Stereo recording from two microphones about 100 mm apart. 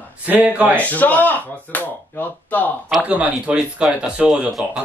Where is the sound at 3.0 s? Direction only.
15° right (ahead or behind).